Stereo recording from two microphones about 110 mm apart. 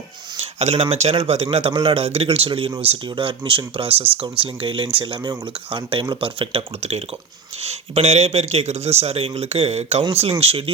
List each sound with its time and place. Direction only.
0.3 s speech: 75° right (ahead or behind)
10.0 s speech: 60° right (ahead or behind)